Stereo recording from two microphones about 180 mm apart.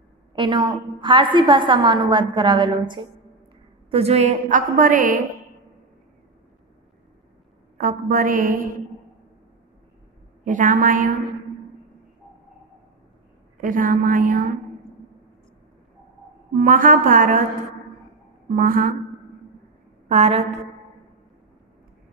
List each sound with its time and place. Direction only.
0.4 s a woman's voice: 25° right (ahead or behind); by 5.2 s 50° right (ahead or behind)
7.7 s a woman's voice: 50° right (ahead or behind)
10.4 s a woman's voice: 45° right (ahead or behind)
13.6 s a woman's voice: 50° right (ahead or behind)
16.5 s a woman's voice: 50° right (ahead or behind)
18.5 s a woman's voice: 50° right (ahead or behind)
20.1 s a woman's voice: 40° right (ahead or behind)